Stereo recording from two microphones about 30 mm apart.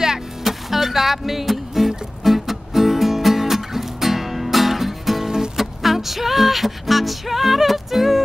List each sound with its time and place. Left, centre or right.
0.4 s music: centre
5.2 s music: centre
5.6 s music: centre